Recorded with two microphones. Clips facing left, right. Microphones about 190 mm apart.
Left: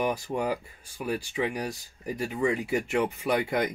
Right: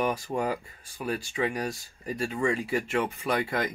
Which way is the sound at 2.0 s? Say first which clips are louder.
Left 1 dB; 15° left (ahead or behind).